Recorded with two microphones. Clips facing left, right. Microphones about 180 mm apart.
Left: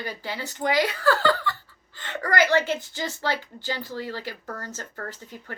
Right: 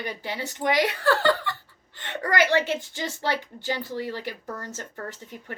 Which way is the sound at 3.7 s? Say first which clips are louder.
Right 2 dB; 20° right (ahead or behind).